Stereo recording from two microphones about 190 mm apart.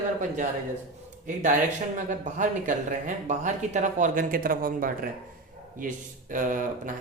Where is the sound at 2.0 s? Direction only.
40° right (ahead or behind).